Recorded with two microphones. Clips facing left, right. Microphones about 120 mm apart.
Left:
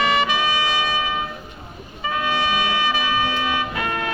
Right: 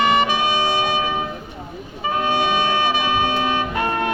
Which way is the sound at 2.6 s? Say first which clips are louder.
Right 3 dB; 30° right (ahead or behind).